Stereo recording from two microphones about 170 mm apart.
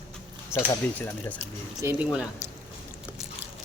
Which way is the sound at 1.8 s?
5° right (ahead or behind).